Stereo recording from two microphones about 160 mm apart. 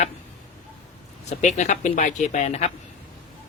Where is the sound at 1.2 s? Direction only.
45° left (ahead or behind).